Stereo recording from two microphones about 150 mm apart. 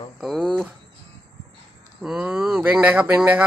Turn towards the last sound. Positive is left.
turn(degrees=-10)  # may be behind; listen again after turning